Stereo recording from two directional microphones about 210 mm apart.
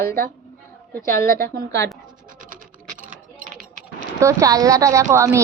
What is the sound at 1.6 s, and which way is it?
Speech, 15° left (ahead or behind).